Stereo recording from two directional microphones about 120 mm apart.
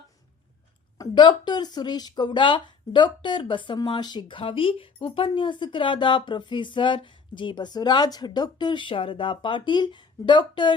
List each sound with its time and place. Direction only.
0.9 s a woman's voice: 40° left (ahead or behind)